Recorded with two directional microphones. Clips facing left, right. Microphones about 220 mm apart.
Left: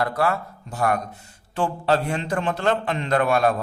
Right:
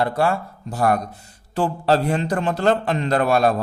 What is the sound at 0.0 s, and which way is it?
A man's voice, 30° right (ahead or behind).